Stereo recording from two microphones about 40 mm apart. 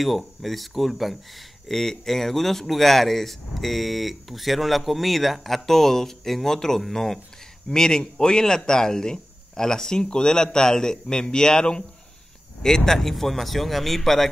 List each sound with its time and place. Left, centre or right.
0.0 s speech: centre